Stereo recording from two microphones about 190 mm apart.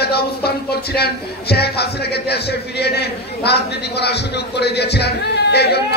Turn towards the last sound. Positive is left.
turn(degrees=60)  # may be behind; listen again after turning